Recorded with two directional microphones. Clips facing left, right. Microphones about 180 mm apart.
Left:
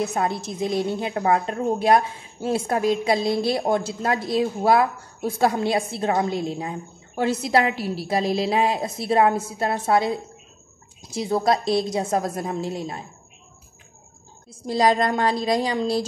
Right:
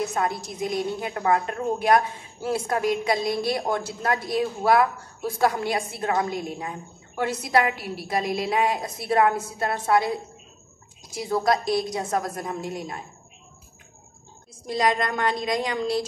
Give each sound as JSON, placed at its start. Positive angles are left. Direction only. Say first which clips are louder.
{"t": 0.0, "sound": "a woman's voice", "louder": "left 2 dB", "side_deg": 25}
{"t": 14.7, "sound": "a woman's voice", "louder": "left 4 dB", "side_deg": 30}